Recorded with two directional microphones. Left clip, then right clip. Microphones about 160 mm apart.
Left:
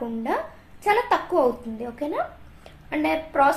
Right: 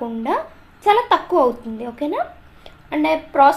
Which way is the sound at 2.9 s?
25° right (ahead or behind).